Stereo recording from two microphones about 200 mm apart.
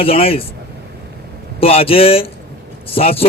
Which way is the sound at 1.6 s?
30° left (ahead or behind).